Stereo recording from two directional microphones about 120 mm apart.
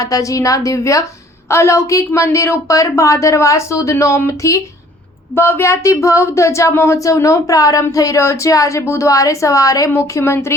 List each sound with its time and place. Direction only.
0.0 s speech: 30° left (ahead or behind)